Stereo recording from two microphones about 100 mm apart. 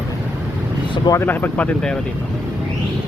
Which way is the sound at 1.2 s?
20° left (ahead or behind).